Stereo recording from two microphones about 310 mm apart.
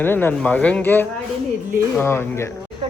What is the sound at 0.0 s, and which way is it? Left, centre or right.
Speech, centre.